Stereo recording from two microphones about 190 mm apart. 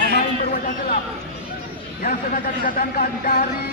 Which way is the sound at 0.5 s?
50° left (ahead or behind).